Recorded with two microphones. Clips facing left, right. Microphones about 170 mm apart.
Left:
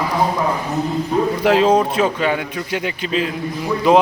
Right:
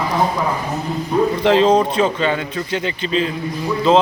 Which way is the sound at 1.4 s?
10° left (ahead or behind).